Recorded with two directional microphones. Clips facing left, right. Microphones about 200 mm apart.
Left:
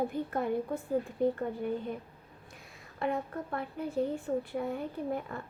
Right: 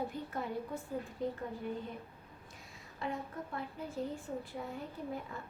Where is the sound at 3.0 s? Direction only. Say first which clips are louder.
Left 7 dB; 60° left (ahead or behind).